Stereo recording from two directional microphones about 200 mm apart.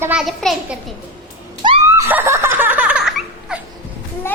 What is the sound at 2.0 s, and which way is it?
Laughter, 10° right (ahead or behind).